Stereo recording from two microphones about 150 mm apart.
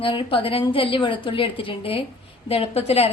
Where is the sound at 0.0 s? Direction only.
35° left (ahead or behind).